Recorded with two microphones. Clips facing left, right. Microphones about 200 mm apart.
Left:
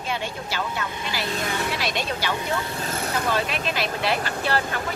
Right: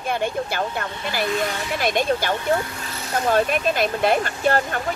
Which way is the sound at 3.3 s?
50° right (ahead or behind).